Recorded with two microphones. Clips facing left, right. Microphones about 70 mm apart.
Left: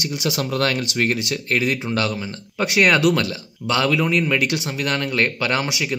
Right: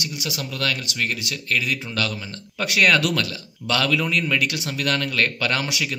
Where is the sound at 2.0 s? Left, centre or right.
Centre.